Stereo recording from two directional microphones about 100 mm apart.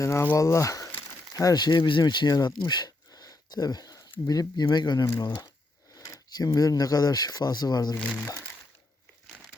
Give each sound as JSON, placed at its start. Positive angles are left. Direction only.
{"t": 0.0, "sound": "speech", "side_deg": 30}
{"t": 5.0, "sound": "speech", "side_deg": 30}